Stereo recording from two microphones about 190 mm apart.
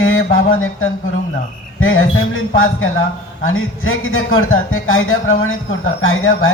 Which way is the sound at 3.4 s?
90° left.